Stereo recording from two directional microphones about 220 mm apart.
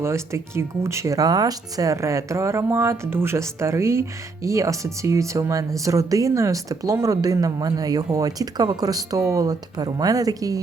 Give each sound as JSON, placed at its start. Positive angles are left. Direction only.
{"t": 0.0, "sound": "speech", "side_deg": -10}